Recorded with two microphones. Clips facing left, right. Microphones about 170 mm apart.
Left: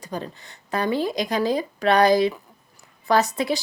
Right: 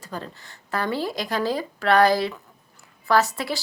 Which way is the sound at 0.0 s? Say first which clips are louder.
Left 3 dB; 15° left (ahead or behind).